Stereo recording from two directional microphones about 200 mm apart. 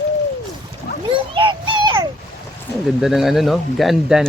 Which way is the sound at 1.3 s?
25° right (ahead or behind).